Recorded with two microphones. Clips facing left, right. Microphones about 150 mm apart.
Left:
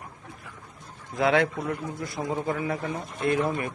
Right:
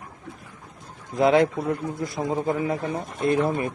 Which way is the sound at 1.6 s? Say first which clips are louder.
Right 4 dB; 20° right (ahead or behind).